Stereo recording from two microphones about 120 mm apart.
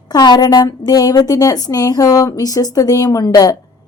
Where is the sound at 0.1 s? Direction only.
35° left (ahead or behind).